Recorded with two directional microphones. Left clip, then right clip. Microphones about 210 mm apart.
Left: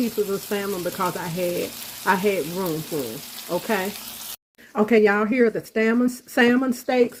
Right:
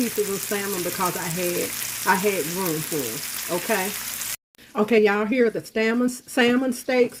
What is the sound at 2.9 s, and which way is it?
Speech, 5° right (ahead or behind).